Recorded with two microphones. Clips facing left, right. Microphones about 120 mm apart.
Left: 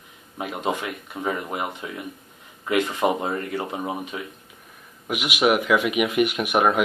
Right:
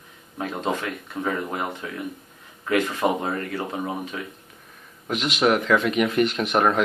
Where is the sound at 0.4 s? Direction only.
15° left (ahead or behind).